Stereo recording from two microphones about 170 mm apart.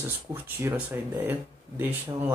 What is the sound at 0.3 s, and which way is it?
Speech, 15° right (ahead or behind).